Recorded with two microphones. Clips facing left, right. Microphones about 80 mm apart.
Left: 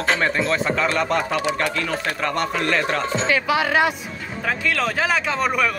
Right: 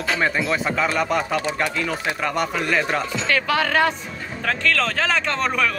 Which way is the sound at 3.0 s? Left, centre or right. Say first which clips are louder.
Left 4 dB; left.